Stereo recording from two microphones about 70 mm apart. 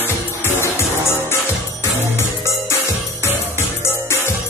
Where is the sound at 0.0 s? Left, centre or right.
Left.